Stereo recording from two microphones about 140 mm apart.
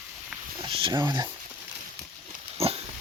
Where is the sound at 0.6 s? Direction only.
35° right (ahead or behind).